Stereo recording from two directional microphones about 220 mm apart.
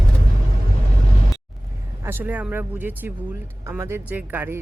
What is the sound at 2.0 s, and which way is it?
Speech, 10° right (ahead or behind).